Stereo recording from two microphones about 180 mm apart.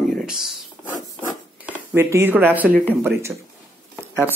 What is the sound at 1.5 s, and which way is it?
Speech, 10° right (ahead or behind).